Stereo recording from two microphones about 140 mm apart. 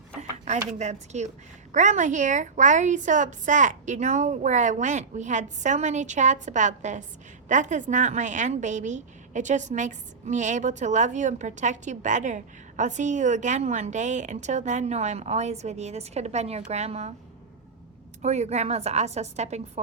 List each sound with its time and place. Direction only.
0.2 s a sound: 55° right (ahead or behind)
0.8 s a woman's voice: 55° right (ahead or behind)
18.2 s a woman's voice: 55° right (ahead or behind)